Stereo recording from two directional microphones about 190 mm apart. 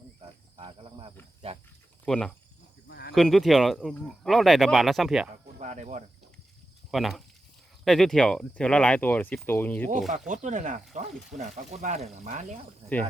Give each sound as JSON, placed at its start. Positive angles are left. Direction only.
{"t": 0.2, "sound": "cricket", "side_deg": -30}
{"t": 1.4, "sound": "speech", "side_deg": -30}
{"t": 2.0, "sound": "speech", "side_deg": 5}
{"t": 2.9, "sound": "sheep", "side_deg": 60}
{"t": 3.2, "sound": "speech", "side_deg": 0}
{"t": 5.5, "sound": "speech", "side_deg": -40}
{"t": 6.9, "sound": "speech", "side_deg": 0}
{"t": 10.2, "sound": "speech", "side_deg": -40}